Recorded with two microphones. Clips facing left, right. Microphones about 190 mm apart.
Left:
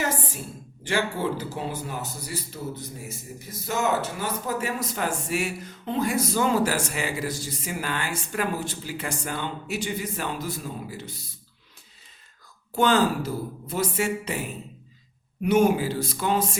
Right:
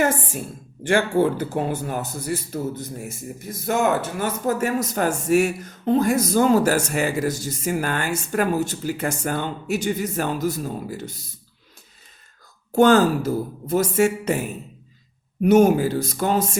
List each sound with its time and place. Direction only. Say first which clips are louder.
0.9 s a man's voice: right 7 dB; 55° right (ahead or behind)
12.7 s a man's voice: right 6 dB; 45° right (ahead or behind)
15.4 s a man's voice: right 5 dB; 45° right (ahead or behind)